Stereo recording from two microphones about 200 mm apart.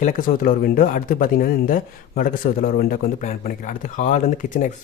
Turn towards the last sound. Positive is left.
turn(degrees=35)  # may be behind; listen again after turning